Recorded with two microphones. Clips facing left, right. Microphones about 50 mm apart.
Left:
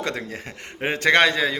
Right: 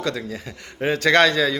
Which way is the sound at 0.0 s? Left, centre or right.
Left.